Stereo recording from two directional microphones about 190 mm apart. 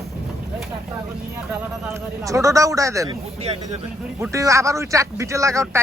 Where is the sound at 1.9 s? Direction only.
15° right (ahead or behind).